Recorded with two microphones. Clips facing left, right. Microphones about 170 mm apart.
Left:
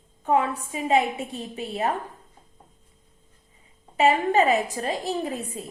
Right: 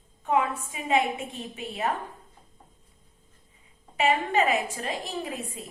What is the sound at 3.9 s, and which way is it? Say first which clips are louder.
A woman's voice: left 4 dB; 35° left (ahead or behind).